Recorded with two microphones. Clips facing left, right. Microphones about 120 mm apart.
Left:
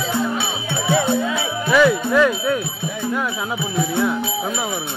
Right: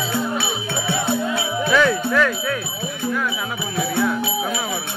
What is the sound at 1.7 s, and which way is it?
Jingle bell, 10° left (ahead or behind).